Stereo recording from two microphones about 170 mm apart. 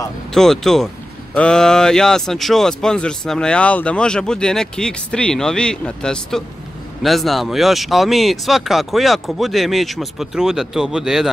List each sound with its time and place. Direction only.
0.3 s speech: centre (ahead or behind)